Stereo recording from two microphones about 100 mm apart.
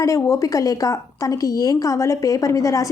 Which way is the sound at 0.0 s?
30° left (ahead or behind).